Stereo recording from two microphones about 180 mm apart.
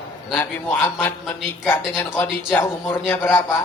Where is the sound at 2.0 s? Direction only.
10° left (ahead or behind).